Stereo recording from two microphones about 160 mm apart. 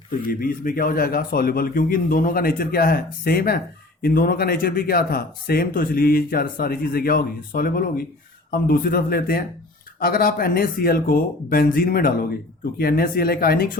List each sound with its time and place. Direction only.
0.3 s a man's voice: 65° left (ahead or behind)